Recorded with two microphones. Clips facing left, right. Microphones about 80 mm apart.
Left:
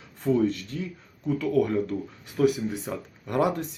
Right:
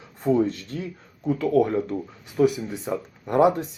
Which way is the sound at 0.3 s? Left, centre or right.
Right.